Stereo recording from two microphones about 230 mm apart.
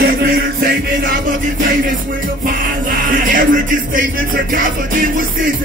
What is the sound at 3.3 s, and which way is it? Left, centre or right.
Music, right.